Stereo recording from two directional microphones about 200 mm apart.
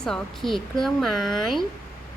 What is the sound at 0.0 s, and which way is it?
A woman's voice, centre (ahead or behind).